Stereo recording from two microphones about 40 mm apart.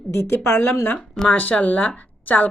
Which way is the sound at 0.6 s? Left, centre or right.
Left.